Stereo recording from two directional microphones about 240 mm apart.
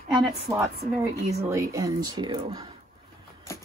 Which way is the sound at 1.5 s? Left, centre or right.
Centre.